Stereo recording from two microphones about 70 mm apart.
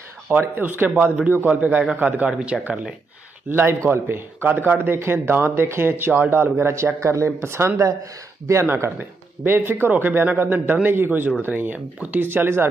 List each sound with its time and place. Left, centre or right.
0.4 s a man's voice: right
3.4 s a man's voice: right
12.3 s speech: right